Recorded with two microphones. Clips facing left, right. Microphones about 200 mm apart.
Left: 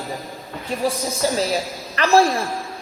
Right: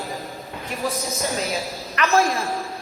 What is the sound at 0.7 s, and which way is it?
A man's voice, 30° left (ahead or behind).